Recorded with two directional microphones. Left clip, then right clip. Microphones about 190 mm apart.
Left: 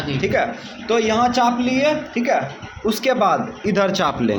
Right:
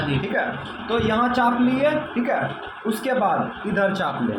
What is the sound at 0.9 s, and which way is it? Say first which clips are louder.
A man's voice: left 4 dB; 50° left (ahead or behind).